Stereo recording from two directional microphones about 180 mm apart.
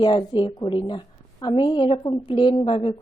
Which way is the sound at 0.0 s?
25° left (ahead or behind).